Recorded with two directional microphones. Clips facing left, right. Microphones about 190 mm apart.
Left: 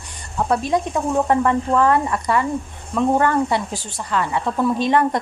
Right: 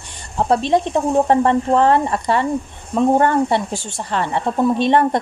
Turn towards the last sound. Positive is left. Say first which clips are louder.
# right 3 dB
turn(degrees=-25)  # may be behind; listen again after turning